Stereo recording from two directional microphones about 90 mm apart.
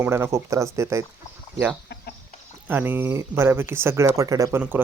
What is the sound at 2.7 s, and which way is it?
Speech, 20° right (ahead or behind).